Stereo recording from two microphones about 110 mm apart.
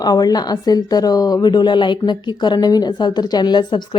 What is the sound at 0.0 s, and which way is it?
A woman's voice, 35° left (ahead or behind).